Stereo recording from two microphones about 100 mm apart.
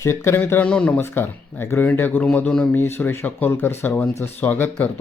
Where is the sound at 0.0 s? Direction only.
25° left (ahead or behind); by 2.6 s 10° left (ahead or behind).